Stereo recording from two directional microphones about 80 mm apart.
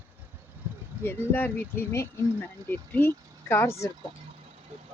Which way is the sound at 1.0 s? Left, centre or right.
Left.